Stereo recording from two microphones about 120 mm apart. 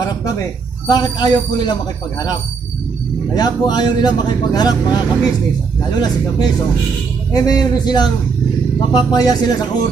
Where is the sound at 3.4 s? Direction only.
35° left (ahead or behind).